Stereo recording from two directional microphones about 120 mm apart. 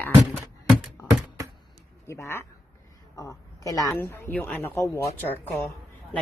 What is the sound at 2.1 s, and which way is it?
A woman's voice, 20° left (ahead or behind).